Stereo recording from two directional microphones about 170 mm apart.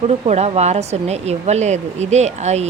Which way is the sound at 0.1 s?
40° right (ahead or behind).